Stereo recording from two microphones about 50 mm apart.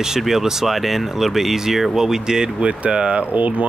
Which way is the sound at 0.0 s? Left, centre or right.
Centre.